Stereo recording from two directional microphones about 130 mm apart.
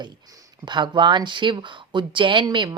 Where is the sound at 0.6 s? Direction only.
35° right (ahead or behind).